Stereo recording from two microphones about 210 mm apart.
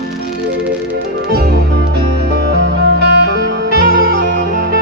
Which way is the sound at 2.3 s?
55° right (ahead or behind).